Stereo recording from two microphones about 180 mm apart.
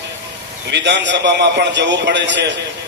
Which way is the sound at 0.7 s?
75° right (ahead or behind).